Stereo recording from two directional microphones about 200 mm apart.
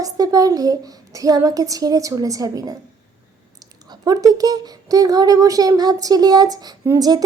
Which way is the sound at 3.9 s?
20° right (ahead or behind).